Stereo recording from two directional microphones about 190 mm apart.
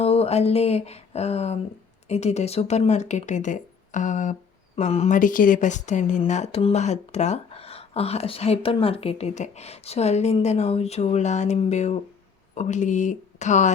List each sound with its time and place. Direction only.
0.0 s speech: 30° left (ahead or behind)